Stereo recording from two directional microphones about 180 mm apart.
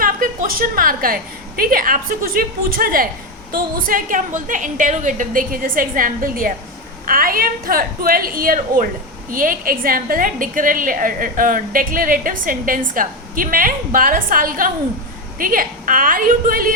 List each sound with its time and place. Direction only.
0.0 s a woman's voice: 50° right (ahead or behind)